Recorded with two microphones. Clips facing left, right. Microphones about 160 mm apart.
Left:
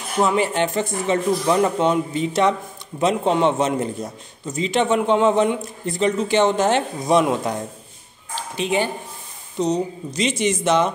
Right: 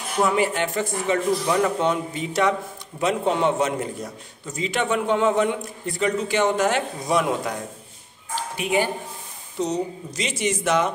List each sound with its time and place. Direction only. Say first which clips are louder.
0.4 s a man's voice: left 2 dB; 25° left (ahead or behind)